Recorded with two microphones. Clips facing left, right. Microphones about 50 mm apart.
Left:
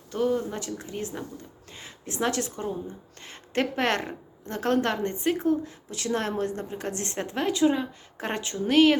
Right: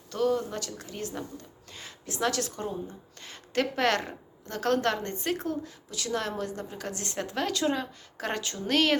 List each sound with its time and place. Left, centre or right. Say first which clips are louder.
0.1 s a woman's voice: left 1 dB; left
8.2 s a woman's voice: left 3 dB; left
8.7 s speech: left 6 dB; centre